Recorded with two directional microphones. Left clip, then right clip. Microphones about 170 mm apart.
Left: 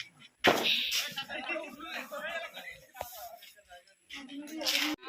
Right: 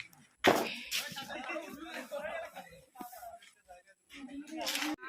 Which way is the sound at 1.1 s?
35° right (ahead or behind).